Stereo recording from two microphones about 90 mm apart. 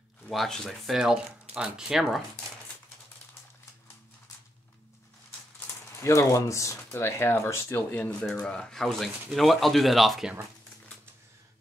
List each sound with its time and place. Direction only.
0.3 s speech: centre (ahead or behind)
6.0 s speech: 35° left (ahead or behind)
7.9 s speech: 20° left (ahead or behind)
8.2 s speech: 5° left (ahead or behind)